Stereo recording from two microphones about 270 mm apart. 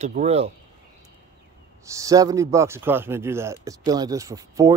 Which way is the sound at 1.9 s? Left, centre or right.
Centre.